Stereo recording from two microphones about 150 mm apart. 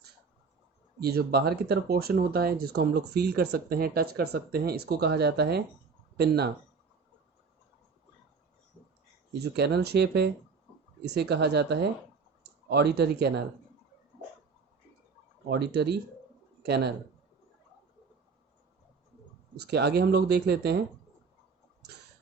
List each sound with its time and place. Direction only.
0.9 s speech: 90° right
9.4 s speech: 90° right
15.4 s speech: 90° right
19.5 s speech: 90° right